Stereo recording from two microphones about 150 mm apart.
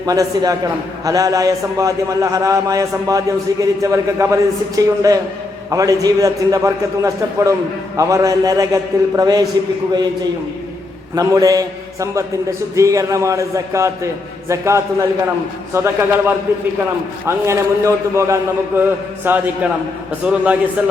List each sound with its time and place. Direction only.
0.0 s a man's voice: 25° right (ahead or behind)
11.1 s a man's voice: 25° right (ahead or behind)